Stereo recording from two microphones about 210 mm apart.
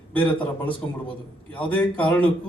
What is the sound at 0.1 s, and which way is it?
A man's voice, 5° left (ahead or behind).